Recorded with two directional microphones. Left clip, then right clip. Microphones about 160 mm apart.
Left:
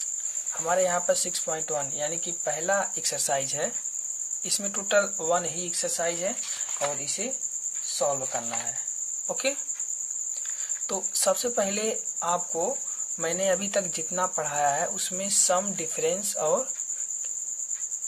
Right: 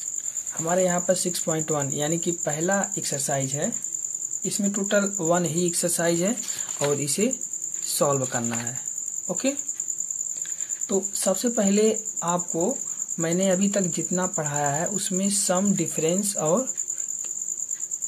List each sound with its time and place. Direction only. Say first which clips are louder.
0.7 s speech: right 2 dB; centre (ahead or behind)
1.4 s speech: right 4 dB; 20° right (ahead or behind)
2.6 s speech: even; centre (ahead or behind)
3.3 s speech: right 1 dB; 15° left (ahead or behind)
5.0 s speech: right 3 dB; 5° right (ahead or behind); by 6.3 s 25° right (ahead or behind)
6.8 s cricket: right 7 dB; 35° right (ahead or behind)
9.3 s speech: right 2 dB; 15° left (ahead or behind)
10.9 s speech: right 1 dB; 20° left (ahead or behind)
11.4 s speech: right 5 dB; 5° left (ahead or behind)